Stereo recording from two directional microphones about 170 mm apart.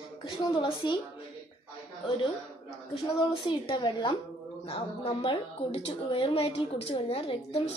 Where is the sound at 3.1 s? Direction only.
30° left (ahead or behind).